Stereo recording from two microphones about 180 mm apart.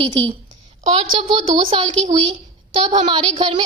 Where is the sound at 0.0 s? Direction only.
30° right (ahead or behind).